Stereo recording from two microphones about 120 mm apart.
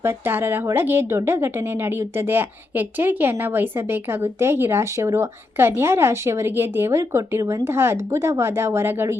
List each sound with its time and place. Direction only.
0.0 s a woman's voice: 20° right (ahead or behind)